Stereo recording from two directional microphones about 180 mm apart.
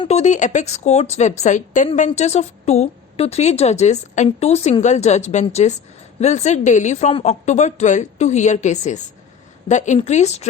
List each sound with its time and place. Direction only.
0.0 s a woman's voice: 40° left (ahead or behind)